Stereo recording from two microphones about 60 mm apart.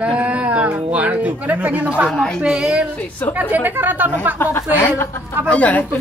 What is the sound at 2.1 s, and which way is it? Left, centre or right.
Speech, centre.